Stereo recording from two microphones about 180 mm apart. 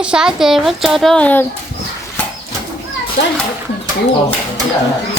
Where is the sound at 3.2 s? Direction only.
70° left (ahead or behind).